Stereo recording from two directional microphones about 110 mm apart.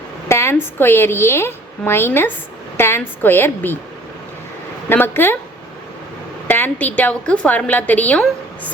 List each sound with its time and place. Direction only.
0.3 s a woman's voice: 25° left (ahead or behind)
4.9 s a woman's voice: 20° left (ahead or behind)
6.5 s a woman's voice: 15° left (ahead or behind)